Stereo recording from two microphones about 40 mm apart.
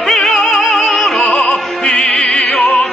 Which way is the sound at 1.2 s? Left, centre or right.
Left.